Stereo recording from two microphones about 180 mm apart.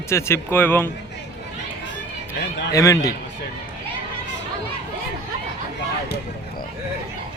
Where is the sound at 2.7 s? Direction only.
20° left (ahead or behind).